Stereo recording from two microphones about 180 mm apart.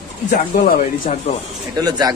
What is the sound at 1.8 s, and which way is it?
Speech, 20° right (ahead or behind).